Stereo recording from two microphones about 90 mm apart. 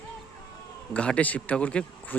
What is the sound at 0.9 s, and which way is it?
Speech, 15° left (ahead or behind).